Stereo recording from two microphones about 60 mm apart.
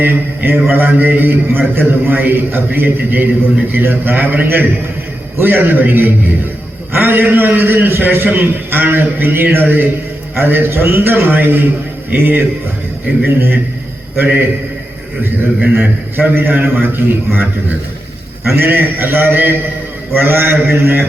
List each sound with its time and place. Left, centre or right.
0.0 s a man's voice: right
15.6 s a man's voice: centre
16.1 s a man's voice: right